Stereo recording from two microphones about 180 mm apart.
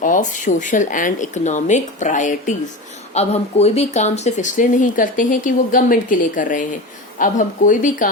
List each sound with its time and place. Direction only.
0.0 s speech: 45° left (ahead or behind)